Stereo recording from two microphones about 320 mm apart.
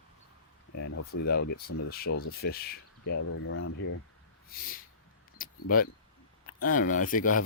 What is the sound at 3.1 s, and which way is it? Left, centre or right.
Speech, left.